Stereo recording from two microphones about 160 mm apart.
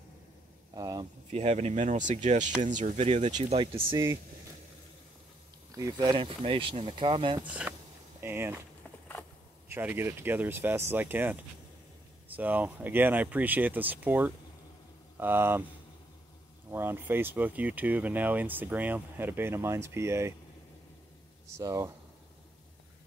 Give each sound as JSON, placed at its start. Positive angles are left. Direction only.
{"t": 0.7, "sound": "speech", "side_deg": -20}
{"t": 1.3, "sound": "speech", "side_deg": -45}
{"t": 3.9, "sound": "speech", "side_deg": -15}
{"t": 5.7, "sound": "speech", "side_deg": -20}
{"t": 7.4, "sound": "speech", "side_deg": -10}
{"t": 9.7, "sound": "speech", "side_deg": -15}
{"t": 12.4, "sound": "speech", "side_deg": -10}
{"t": 16.7, "sound": "speech", "side_deg": -15}
{"t": 21.5, "sound": "speech", "side_deg": -20}